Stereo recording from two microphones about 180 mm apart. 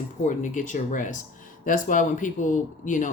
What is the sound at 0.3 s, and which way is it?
Speech, 45° left (ahead or behind).